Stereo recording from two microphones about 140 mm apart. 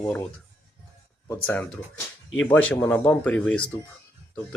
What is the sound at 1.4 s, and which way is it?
Speech, 10° left (ahead or behind).